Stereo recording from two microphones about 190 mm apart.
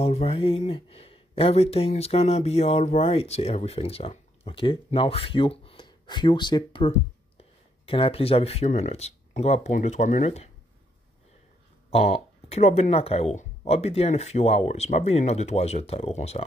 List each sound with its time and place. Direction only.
0.0 s speech: 30° left (ahead or behind)
11.9 s speech: 30° left (ahead or behind)